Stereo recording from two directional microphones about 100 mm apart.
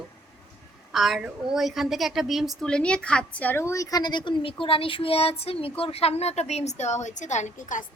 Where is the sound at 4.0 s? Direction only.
50° left (ahead or behind); by 6.6 s 90° left.